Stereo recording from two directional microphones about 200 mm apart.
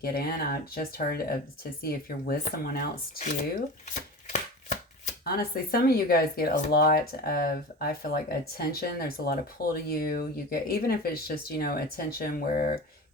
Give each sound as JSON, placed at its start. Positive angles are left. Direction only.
{"t": 0.0, "sound": "speech", "side_deg": 50}
{"t": 3.8, "sound": "chopping", "side_deg": 35}
{"t": 5.2, "sound": "speech", "side_deg": 50}